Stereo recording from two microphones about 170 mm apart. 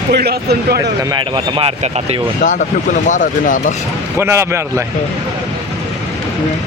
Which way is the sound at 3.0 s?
50° left (ahead or behind).